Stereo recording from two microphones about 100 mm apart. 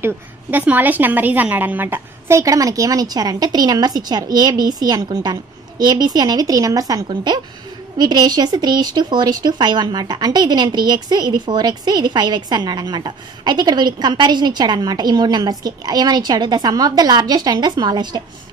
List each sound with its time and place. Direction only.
0.0 s a woman's voice: 15° right (ahead or behind); by 18.2 s 45° right (ahead or behind)